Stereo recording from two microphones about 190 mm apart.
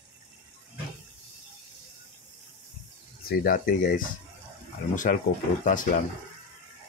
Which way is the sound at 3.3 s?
45° left (ahead or behind).